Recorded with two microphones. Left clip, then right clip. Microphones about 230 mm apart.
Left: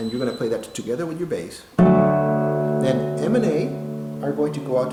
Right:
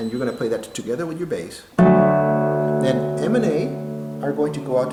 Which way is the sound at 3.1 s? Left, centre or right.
Centre.